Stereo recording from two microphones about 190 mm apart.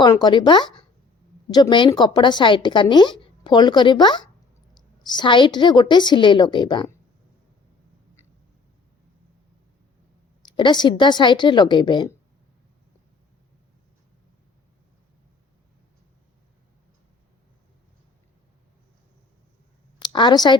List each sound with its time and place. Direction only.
0.0 s a woman's voice: 20° left (ahead or behind)
10.4 s a woman's voice: 25° left (ahead or behind)
20.0 s a woman's voice: 25° left (ahead or behind)